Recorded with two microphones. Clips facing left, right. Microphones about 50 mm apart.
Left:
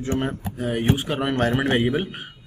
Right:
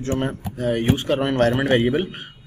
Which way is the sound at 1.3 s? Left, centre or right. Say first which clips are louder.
Right 1 dB; centre.